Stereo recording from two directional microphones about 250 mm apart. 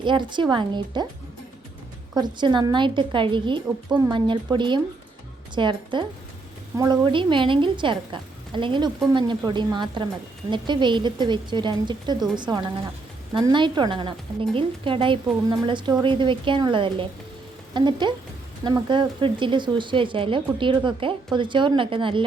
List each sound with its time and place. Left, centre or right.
0.0 s speech: centre
2.1 s a woman's voice: centre